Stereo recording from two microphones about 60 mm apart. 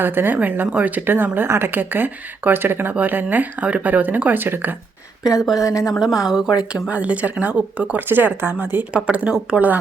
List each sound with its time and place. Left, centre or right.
0.0 s speech: right
5.2 s a woman's voice: centre
6.9 s speech: right
8.9 s speech: centre